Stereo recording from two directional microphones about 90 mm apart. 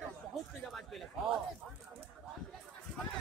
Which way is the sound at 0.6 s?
5° left (ahead or behind).